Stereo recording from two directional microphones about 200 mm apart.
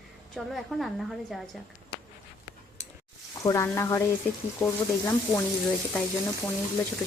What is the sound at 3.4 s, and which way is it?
Speech, 15° left (ahead or behind).